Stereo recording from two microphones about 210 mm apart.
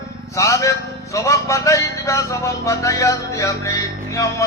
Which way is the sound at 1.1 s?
15° left (ahead or behind).